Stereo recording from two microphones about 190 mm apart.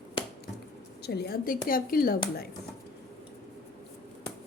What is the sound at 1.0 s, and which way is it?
A woman's voice, 55° left (ahead or behind).